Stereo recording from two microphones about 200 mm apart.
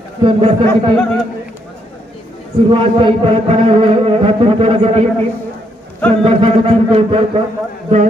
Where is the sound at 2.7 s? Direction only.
30° right (ahead or behind).